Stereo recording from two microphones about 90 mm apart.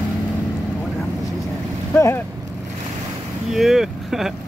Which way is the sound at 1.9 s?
25° left (ahead or behind).